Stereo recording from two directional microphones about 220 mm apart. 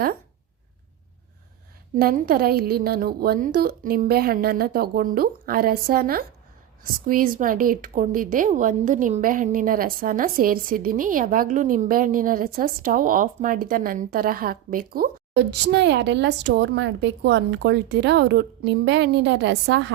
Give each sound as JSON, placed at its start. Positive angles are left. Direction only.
{"t": 2.0, "sound": "a woman's voice", "side_deg": -40}